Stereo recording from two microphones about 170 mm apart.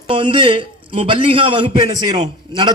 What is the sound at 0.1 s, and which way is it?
A man's voice, 30° right (ahead or behind).